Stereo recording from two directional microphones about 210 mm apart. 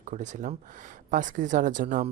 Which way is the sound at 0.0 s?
35° right (ahead or behind).